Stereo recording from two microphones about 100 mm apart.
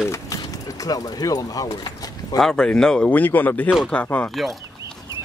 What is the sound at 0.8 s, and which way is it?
Speech, 40° left (ahead or behind).